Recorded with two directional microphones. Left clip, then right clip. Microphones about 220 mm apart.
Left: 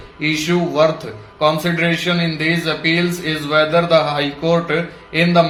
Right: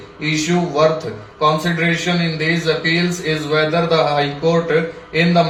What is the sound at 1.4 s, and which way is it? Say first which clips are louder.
A man's voice: even; 45° left (ahead or behind).